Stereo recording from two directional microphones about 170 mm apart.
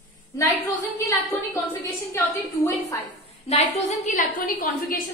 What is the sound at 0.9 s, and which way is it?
A woman's voice, 20° left (ahead or behind).